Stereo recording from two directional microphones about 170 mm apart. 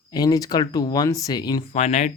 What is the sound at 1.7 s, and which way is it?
Speech, 40° left (ahead or behind).